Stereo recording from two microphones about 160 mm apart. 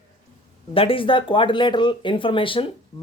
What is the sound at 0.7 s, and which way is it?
Speech, 35° left (ahead or behind).